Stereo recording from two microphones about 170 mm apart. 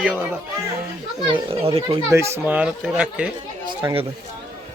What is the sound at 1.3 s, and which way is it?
Speech, 35° right (ahead or behind).